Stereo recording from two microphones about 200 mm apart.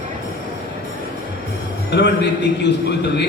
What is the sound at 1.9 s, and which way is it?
A man's voice, 60° left (ahead or behind).